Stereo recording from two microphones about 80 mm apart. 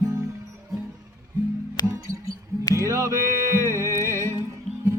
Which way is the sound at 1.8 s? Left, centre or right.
Left.